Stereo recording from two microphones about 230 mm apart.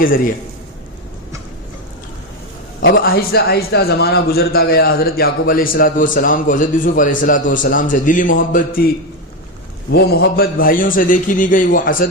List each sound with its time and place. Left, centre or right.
2.8 s a man's voice: left
9.9 s a man's voice: left